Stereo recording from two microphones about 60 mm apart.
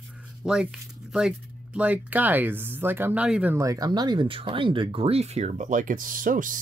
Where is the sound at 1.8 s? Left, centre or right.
Right.